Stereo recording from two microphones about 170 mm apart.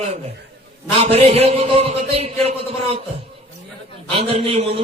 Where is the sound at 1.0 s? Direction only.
35° right (ahead or behind).